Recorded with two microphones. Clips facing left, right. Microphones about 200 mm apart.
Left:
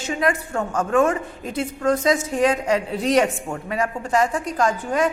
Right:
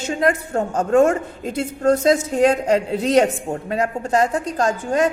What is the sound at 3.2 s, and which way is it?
A woman's voice, 35° right (ahead or behind).